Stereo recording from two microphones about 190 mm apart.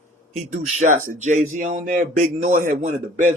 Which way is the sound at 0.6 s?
40° right (ahead or behind).